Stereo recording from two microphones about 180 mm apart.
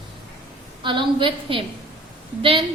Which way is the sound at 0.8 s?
25° right (ahead or behind).